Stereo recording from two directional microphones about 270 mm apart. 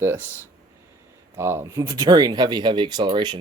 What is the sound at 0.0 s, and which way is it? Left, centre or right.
Speech, centre.